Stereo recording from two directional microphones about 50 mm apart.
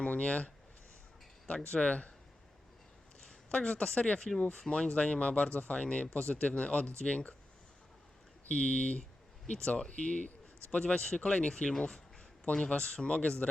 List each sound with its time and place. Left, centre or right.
0.0 s speech: left
3.2 s speech: centre
8.4 s speech: left